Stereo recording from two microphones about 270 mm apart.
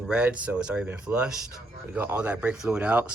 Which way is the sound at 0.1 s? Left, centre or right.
Centre.